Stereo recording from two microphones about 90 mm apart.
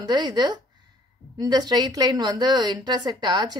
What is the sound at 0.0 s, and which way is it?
A woman's voice, 55° right (ahead or behind).